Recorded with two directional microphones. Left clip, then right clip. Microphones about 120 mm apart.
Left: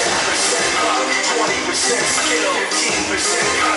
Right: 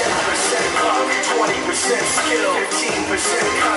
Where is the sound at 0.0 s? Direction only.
25° right (ahead or behind).